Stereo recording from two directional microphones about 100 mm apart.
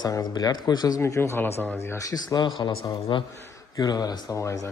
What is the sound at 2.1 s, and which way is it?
Speech, 45° left (ahead or behind).